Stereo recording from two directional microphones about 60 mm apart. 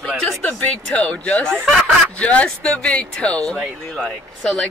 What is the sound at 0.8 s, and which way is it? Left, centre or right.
Speech, left.